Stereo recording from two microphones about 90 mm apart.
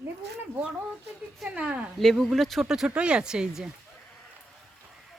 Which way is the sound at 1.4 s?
15° right (ahead or behind).